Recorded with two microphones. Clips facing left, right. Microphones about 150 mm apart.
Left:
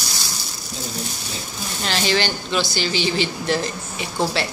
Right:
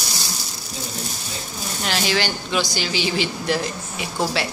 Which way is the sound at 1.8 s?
10° right (ahead or behind).